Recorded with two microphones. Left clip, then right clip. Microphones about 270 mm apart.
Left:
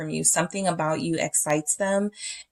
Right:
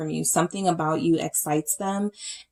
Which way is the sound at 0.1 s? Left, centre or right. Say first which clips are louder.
Even; left.